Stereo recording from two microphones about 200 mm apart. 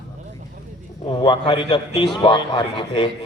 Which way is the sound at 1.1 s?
25° left (ahead or behind).